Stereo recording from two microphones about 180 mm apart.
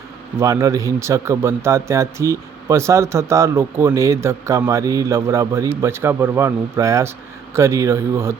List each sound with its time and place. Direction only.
0.3 s a man's voice: 15° right (ahead or behind)